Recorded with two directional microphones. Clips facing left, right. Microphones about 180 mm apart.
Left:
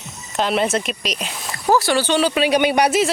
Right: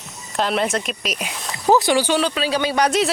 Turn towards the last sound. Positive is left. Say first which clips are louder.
# left 1 dB
turn(degrees=0)  # may be behind; listen again after turning